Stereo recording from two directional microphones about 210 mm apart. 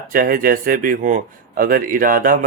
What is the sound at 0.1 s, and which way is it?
Speech, 40° right (ahead or behind).